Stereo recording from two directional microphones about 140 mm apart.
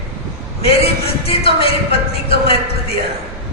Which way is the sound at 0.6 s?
45° left (ahead or behind).